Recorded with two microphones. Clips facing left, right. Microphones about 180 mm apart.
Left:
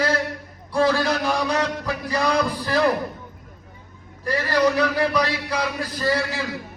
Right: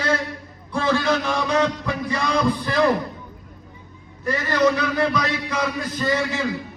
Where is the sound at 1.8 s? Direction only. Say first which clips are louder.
Left 1 dB; 35° left (ahead or behind).